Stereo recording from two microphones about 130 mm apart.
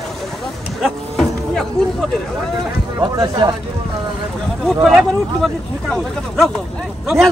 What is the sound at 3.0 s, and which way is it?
Speech, 30° right (ahead or behind).